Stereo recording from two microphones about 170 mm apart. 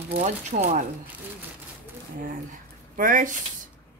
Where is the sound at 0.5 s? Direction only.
45° right (ahead or behind).